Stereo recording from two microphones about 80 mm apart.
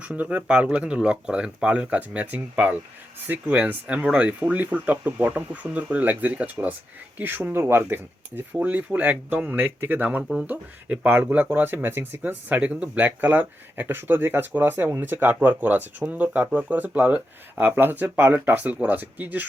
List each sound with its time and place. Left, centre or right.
0.0 s speech: centre